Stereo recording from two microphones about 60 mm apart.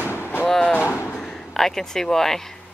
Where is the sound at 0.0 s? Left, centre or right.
Left.